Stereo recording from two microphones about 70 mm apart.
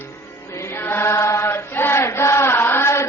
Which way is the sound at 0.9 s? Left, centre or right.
Left.